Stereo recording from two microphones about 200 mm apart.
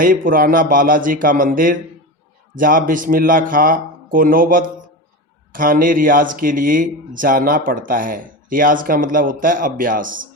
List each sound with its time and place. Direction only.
0.0 s speech: 45° right (ahead or behind)